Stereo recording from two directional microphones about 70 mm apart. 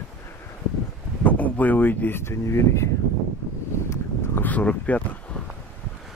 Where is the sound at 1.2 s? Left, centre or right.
Left.